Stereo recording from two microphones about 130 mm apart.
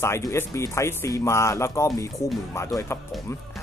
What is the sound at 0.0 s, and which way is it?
Speech, 20° left (ahead or behind).